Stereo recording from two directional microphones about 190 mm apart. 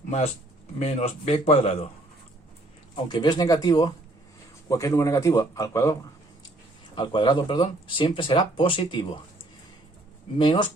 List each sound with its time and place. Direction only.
0.8 s speech: 35° left (ahead or behind)
2.9 s a man's voice: 20° left (ahead or behind)
10.3 s speech: 25° left (ahead or behind)